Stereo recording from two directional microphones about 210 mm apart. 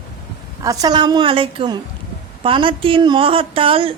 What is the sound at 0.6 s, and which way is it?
A woman's voice, 15° right (ahead or behind).